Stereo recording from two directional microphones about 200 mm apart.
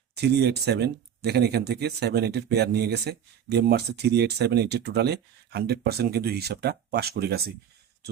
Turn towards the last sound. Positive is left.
turn(degrees=-50)  # may be behind; listen again after turning